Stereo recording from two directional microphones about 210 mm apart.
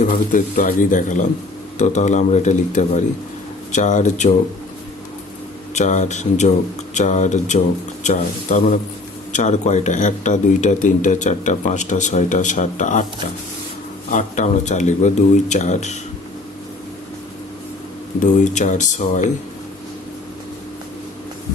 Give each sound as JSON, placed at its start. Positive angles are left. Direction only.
{"t": 0.0, "sound": "speech", "side_deg": 40}
{"t": 5.7, "sound": "speech", "side_deg": 35}
{"t": 14.1, "sound": "speech", "side_deg": 35}
{"t": 18.2, "sound": "speech", "side_deg": 35}